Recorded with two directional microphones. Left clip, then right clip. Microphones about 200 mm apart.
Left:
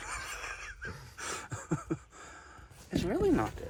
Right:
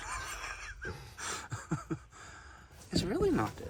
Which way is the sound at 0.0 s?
15° right (ahead or behind).